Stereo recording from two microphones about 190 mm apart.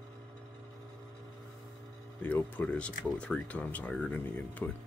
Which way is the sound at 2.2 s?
10° left (ahead or behind).